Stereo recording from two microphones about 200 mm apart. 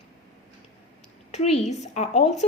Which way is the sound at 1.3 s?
35° left (ahead or behind).